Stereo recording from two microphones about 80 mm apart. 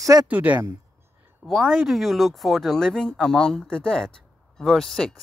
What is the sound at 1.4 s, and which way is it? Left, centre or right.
Speech, centre.